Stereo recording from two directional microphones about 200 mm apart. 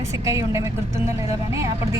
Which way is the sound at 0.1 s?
15° right (ahead or behind).